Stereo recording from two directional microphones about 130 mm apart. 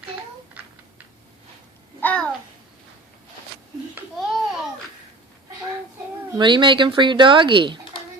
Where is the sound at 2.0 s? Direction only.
10° left (ahead or behind).